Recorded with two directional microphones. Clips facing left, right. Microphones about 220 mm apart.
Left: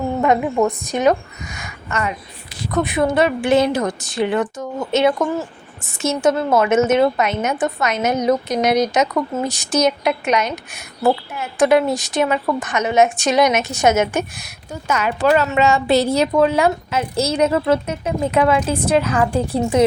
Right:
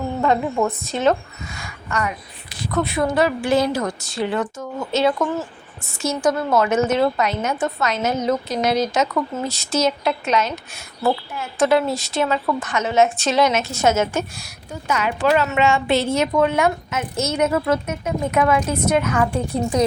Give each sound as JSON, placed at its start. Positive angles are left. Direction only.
{"t": 0.2, "sound": "a woman's voice", "side_deg": 20}
{"t": 14.8, "sound": "a woman's voice", "side_deg": 45}